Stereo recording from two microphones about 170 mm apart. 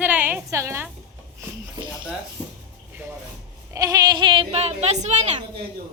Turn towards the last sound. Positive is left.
turn(degrees=-40)  # may be behind; listen again after turning